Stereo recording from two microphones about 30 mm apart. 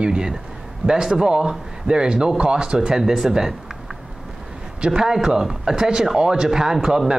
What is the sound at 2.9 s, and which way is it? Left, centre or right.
Speech, centre.